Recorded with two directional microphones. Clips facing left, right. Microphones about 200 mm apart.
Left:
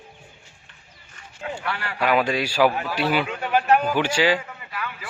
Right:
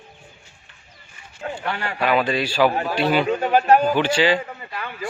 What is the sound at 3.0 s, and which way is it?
Speech, 10° left (ahead or behind).